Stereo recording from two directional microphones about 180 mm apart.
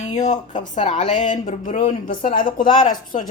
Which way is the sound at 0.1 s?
40° left (ahead or behind).